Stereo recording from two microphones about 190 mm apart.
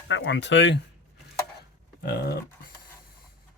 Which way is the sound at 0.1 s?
70° left (ahead or behind).